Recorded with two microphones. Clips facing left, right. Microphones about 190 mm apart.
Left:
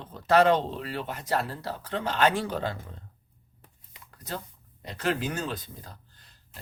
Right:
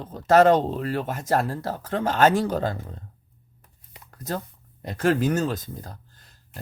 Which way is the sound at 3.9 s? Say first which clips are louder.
Right 7 dB; 45° right (ahead or behind).